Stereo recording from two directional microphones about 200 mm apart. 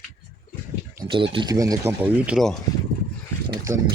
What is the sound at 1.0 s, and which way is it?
Speech, 25° right (ahead or behind).